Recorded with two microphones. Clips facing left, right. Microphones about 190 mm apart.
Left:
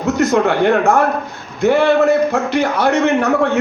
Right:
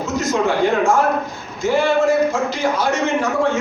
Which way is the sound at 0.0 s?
60° left (ahead or behind).